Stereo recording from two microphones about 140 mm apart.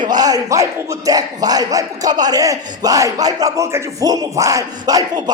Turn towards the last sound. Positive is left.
turn(degrees=-30)  # may be behind; listen again after turning